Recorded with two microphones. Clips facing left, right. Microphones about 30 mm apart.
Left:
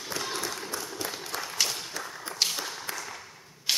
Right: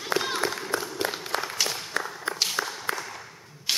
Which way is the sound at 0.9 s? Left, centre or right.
Right.